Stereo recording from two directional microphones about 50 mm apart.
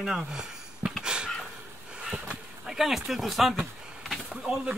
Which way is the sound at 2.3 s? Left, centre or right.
Centre.